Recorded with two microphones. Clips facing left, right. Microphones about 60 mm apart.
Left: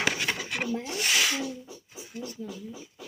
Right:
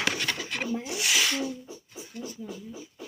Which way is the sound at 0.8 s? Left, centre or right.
Centre.